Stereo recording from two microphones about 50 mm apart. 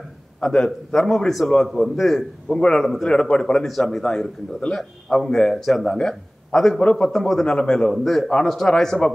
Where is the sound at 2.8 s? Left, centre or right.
Centre.